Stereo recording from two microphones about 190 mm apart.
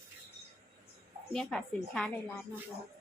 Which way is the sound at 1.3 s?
5° left (ahead or behind).